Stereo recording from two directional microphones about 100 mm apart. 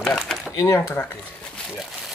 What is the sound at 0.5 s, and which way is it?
Speech, 25° left (ahead or behind).